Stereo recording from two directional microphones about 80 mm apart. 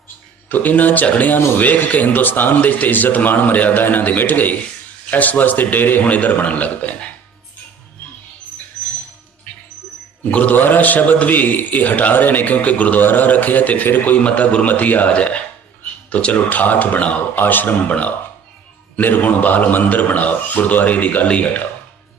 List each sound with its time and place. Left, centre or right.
0.4 s a man's voice: left
10.3 s a man's voice: left